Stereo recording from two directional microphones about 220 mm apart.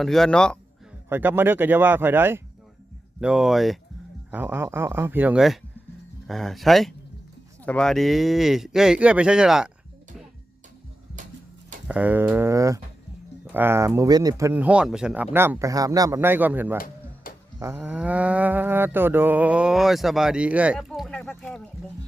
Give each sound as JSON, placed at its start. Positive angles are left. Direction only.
{"t": 0.0, "sound": "livestock", "side_deg": 0}
{"t": 1.1, "sound": "speech", "side_deg": -10}
{"t": 3.2, "sound": "livestock", "side_deg": -5}
{"t": 4.3, "sound": "speech", "side_deg": -10}
{"t": 6.2, "sound": "livestock", "side_deg": 0}
{"t": 11.9, "sound": "speech", "side_deg": -5}
{"t": 17.2, "sound": "a sound", "side_deg": 40}
{"t": 17.6, "sound": "livestock", "side_deg": -10}